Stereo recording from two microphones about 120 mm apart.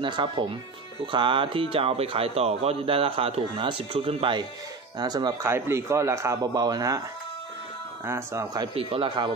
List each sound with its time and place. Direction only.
0.0 s speech: 40° right (ahead or behind)
5.4 s speech: 25° right (ahead or behind)
8.0 s speech: 20° right (ahead or behind)
8.7 s speech: 50° right (ahead or behind)